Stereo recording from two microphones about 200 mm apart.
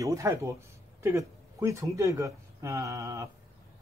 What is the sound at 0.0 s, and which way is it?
Speech, 15° right (ahead or behind).